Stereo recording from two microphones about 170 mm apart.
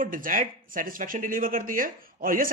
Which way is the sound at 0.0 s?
55° right (ahead or behind).